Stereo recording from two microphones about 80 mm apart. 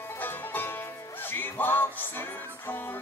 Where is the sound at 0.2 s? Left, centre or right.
Left.